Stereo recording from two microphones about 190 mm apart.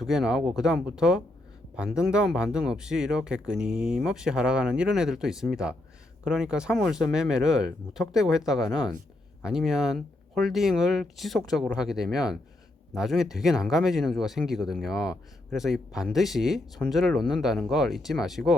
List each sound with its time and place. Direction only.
0.0 s speech: 5° right (ahead or behind)
8.6 s speech: 20° left (ahead or behind)
9.4 s speech: centre (ahead or behind)